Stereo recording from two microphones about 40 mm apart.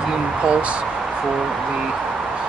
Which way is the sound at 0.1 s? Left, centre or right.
Right.